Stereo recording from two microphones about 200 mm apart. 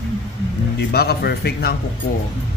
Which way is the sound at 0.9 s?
50° left (ahead or behind).